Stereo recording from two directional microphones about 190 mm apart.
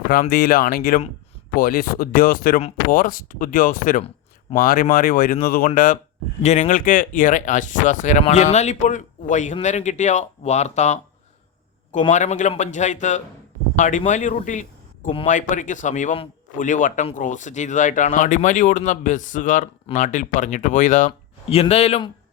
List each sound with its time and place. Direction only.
0.1 s speech: 50° left (ahead or behind)
12.1 s speech: 40° left (ahead or behind)
21.1 s speech: 30° left (ahead or behind)